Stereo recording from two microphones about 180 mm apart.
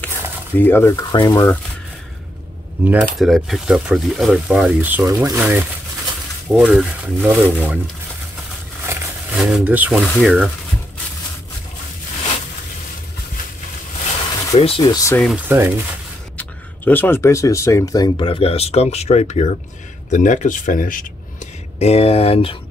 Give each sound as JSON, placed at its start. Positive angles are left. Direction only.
{"t": 0.6, "sound": "speech", "side_deg": 10}
{"t": 2.8, "sound": "coin", "side_deg": -10}
{"t": 8.8, "sound": "crumpling", "side_deg": -10}
{"t": 9.9, "sound": "speech", "side_deg": 0}
{"t": 14.5, "sound": "speech", "side_deg": 35}
{"t": 14.8, "sound": "speech", "side_deg": 20}
{"t": 15.3, "sound": "coin", "side_deg": -10}
{"t": 16.3, "sound": "speech", "side_deg": 10}
{"t": 21.7, "sound": "speech", "side_deg": 35}